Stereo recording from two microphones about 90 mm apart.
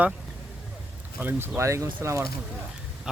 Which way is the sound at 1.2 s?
25° right (ahead or behind).